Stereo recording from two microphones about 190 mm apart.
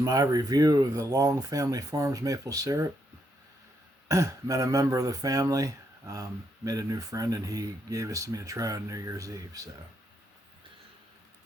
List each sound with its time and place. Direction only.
0.0 s speech: 20° right (ahead or behind)
4.1 s speech: 15° right (ahead or behind)